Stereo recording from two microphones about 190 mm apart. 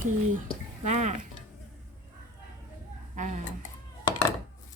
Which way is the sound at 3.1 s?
40° right (ahead or behind).